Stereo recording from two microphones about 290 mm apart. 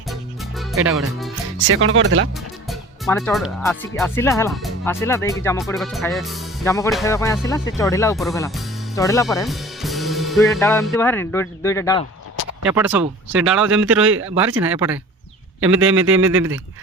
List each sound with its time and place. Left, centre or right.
0.1 s music: centre
1.6 s speech: right
2.6 s music: centre
3.6 s speech: centre
6.7 s speech: centre
9.5 s speech: centre
12.6 s speech: centre
13.7 s speech: right
14.3 s speech: centre
16.0 s speech: centre